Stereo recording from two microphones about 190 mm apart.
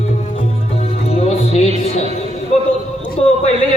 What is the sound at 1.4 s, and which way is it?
Music, 35° left (ahead or behind).